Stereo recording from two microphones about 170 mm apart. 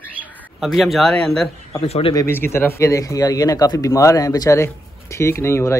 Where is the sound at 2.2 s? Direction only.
15° left (ahead or behind).